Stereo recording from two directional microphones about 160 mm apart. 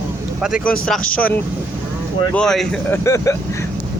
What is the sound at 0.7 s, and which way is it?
Speech, 5° left (ahead or behind).